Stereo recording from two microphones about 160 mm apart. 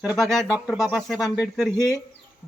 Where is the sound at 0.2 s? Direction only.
Centre (ahead or behind).